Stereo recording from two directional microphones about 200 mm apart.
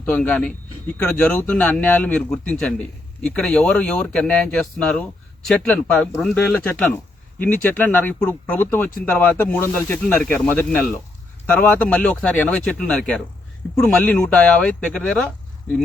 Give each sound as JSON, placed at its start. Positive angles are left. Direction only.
{"t": 0.0, "sound": "speech", "side_deg": 10}